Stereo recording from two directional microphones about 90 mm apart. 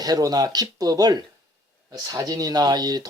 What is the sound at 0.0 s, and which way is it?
Speech, 45° right (ahead or behind).